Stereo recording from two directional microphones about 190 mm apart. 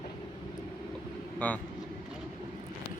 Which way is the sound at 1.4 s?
10° left (ahead or behind).